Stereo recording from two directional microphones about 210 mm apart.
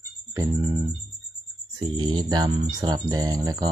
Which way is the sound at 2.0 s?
20° right (ahead or behind).